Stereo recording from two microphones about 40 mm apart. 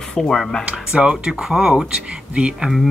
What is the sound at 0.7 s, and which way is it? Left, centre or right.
Speech, right.